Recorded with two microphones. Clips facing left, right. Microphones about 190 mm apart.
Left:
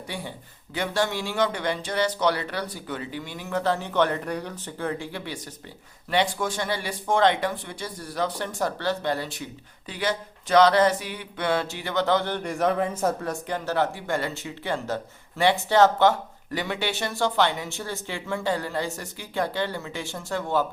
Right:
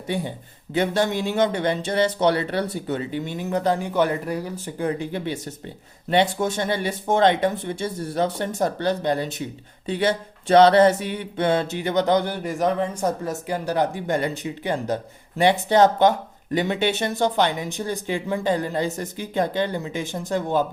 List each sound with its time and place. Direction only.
0.1 s speech: 20° right (ahead or behind); by 13.0 s 5° left (ahead or behind)
13.5 s speech: 15° right (ahead or behind)